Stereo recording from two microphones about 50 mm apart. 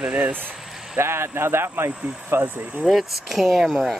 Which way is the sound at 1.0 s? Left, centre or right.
Right.